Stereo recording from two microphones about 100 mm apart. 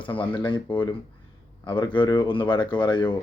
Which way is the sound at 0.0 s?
60° left (ahead or behind).